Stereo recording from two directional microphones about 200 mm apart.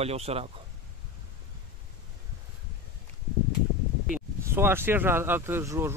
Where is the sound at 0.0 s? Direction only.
30° right (ahead or behind).